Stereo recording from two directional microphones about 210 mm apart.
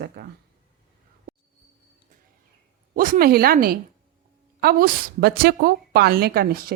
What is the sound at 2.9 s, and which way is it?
A woman's voice, 40° right (ahead or behind).